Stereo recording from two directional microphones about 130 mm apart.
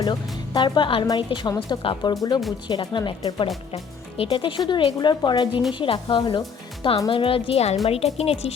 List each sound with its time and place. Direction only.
0.0 s speech: 35° left (ahead or behind)
4.2 s a woman's voice: 45° left (ahead or behind)